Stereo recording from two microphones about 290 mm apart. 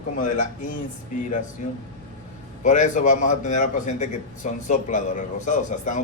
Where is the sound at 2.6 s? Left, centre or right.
Left.